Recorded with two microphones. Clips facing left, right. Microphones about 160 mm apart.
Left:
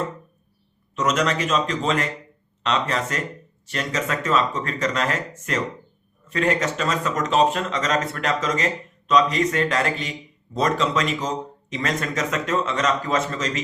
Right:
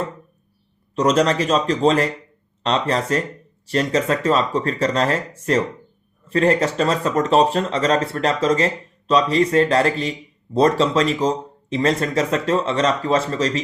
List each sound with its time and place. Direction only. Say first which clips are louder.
0.9 s speech: right 5 dB; 35° right (ahead or behind)